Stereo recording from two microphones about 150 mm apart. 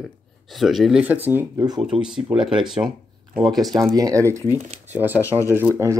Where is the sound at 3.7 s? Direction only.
25° right (ahead or behind).